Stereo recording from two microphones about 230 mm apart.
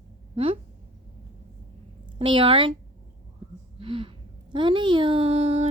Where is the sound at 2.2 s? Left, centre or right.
Right.